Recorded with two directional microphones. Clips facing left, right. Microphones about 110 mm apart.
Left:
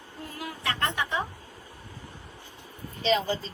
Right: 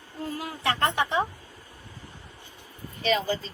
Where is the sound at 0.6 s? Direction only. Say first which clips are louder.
Right 4 dB; 30° right (ahead or behind).